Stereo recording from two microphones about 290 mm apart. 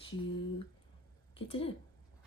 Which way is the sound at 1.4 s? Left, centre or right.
Centre.